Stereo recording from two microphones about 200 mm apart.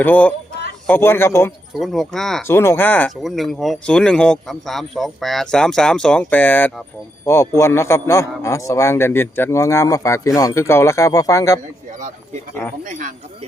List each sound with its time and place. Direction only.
0.0 s a man's voice: 10° left (ahead or behind)
1.7 s speech: centre (ahead or behind)
2.5 s a man's voice: 10° left (ahead or behind)
11.9 s speech: 40° right (ahead or behind)